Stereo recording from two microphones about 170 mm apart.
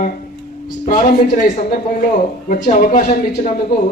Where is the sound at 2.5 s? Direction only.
50° left (ahead or behind).